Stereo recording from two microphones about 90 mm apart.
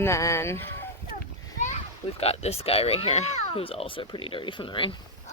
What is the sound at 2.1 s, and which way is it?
Speech, 90° left.